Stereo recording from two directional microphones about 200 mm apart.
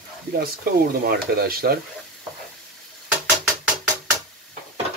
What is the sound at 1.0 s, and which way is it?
Speech, 50° right (ahead or behind).